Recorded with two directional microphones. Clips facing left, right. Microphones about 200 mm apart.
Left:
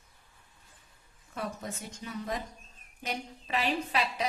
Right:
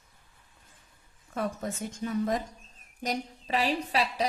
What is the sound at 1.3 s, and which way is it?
A woman's voice, 50° right (ahead or behind).